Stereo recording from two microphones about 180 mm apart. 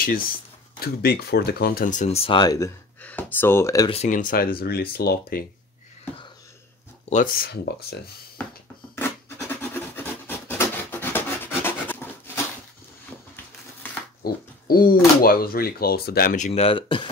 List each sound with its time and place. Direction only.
0.0 s speech: 50° left (ahead or behind); by 2.7 s 20° left (ahead or behind)
3.0 s speech: 10° left (ahead or behind)
3.9 s speech: 40° left (ahead or behind); by 5.4 s 60° left (ahead or behind)
7.1 s speech: 45° left (ahead or behind)
9.6 s rub: 10° left (ahead or behind)
14.2 s speech: 55° left (ahead or behind); by 17.1 s 30° left (ahead or behind)